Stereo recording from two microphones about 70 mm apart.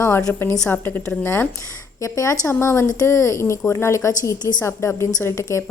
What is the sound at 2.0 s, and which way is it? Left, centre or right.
A woman's voice, left.